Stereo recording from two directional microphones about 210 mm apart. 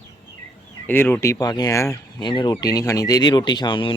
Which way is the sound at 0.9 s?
10° left (ahead or behind).